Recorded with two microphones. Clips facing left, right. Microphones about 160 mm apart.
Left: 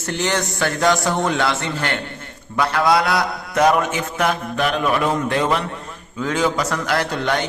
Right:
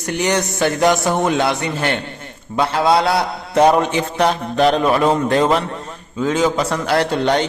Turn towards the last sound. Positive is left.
turn(degrees=-25)  # may be behind; listen again after turning